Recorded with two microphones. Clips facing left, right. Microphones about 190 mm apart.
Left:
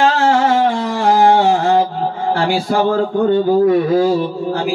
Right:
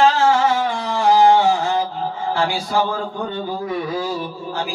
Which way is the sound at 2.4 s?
55° left (ahead or behind).